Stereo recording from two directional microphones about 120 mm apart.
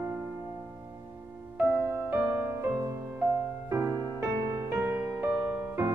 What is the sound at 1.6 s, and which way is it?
Music, 15° right (ahead or behind).